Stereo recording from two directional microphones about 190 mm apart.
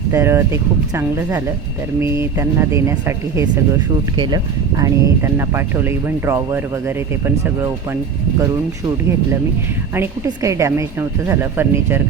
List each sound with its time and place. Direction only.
0.1 s speech: 15° right (ahead or behind)
4.8 s speech: 15° right (ahead or behind)
10.2 s speech: 15° right (ahead or behind)